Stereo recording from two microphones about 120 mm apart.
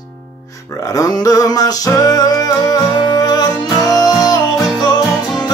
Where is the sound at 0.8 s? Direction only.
30° left (ahead or behind).